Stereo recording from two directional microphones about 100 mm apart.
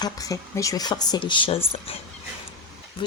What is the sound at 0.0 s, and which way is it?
Speech, 35° left (ahead or behind).